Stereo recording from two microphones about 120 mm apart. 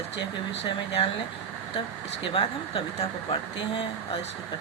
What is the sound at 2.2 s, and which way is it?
A woman's voice, 50° left (ahead or behind).